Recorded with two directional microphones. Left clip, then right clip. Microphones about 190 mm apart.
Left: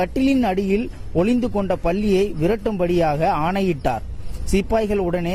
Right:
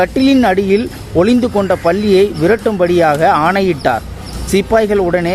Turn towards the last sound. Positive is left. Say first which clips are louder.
# right 9 dB
turn(degrees=35)  # may be behind; listen again after turning